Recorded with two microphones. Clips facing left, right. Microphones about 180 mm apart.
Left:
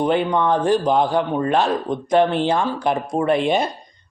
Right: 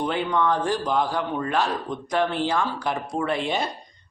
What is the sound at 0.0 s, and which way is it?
Speech, 20° left (ahead or behind).